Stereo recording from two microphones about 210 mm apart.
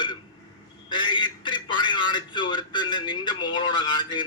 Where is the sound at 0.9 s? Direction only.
20° left (ahead or behind).